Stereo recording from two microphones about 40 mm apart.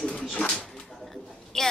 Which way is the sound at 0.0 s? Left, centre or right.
Left.